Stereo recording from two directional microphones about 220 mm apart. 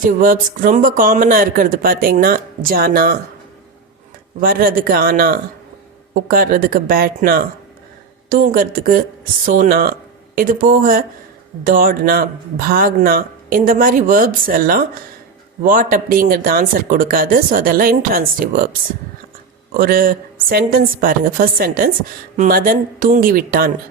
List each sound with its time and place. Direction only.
0.0 s speech: 40° right (ahead or behind)
4.4 s speech: 40° right (ahead or behind)